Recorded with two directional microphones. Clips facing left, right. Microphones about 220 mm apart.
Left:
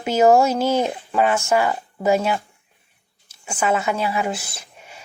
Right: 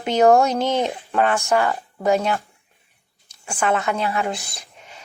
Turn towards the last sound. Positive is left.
turn(degrees=10)  # may be behind; listen again after turning